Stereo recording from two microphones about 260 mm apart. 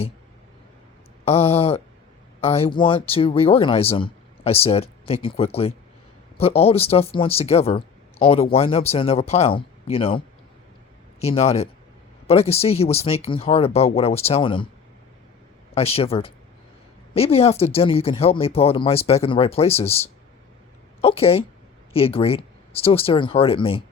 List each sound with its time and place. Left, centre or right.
1.2 s speech: left
15.7 s speech: left